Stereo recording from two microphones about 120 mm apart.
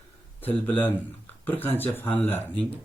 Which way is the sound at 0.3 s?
15° left (ahead or behind).